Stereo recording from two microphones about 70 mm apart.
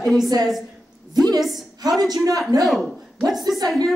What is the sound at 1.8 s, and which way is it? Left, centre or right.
Speech, right.